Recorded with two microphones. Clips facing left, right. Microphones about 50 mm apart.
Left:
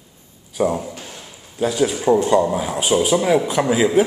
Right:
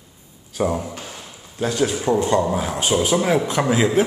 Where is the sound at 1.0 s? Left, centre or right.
Centre.